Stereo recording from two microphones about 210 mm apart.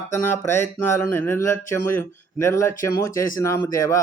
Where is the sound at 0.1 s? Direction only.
10° left (ahead or behind).